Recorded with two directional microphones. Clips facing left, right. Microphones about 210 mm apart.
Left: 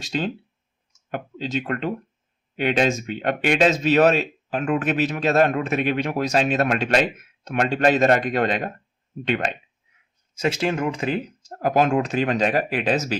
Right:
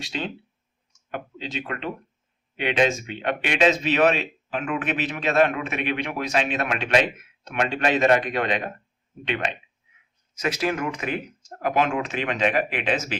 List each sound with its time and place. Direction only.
0.0 s speech: 45° left (ahead or behind)
10.3 s speech: 30° left (ahead or behind)